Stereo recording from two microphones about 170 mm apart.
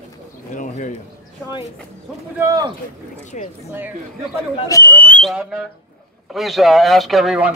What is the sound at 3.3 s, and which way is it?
Speech, 45° left (ahead or behind).